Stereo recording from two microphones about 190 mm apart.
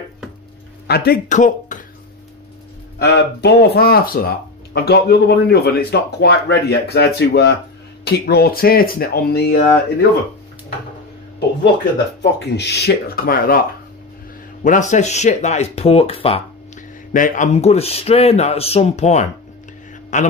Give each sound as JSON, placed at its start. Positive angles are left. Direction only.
{"t": 0.8, "sound": "speech", "side_deg": 55}
{"t": 3.0, "sound": "a man's voice", "side_deg": 60}
{"t": 12.2, "sound": "a man's voice", "side_deg": 65}
{"t": 17.1, "sound": "speech", "side_deg": 45}